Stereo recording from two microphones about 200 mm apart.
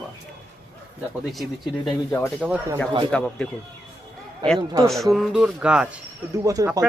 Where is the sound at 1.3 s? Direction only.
Centre (ahead or behind).